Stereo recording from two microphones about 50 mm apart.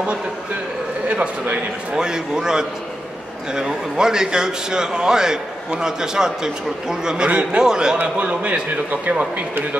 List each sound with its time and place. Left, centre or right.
1.0 s a man's voice: right
7.2 s a man's voice: right
8.0 s a man's voice: right